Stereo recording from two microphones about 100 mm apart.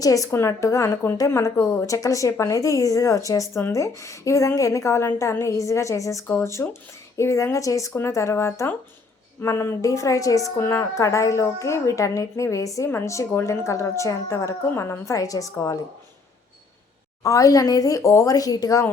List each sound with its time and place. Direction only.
0.0 s a woman's voice: 35° left (ahead or behind)
17.2 s a woman's voice: 35° left (ahead or behind)